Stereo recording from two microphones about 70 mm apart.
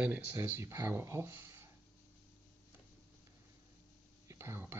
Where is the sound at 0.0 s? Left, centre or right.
Right.